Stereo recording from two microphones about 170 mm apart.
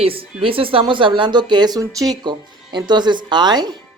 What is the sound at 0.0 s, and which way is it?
Speech, 35° right (ahead or behind).